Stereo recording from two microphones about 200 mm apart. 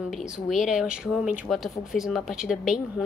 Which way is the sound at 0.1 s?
Centre (ahead or behind).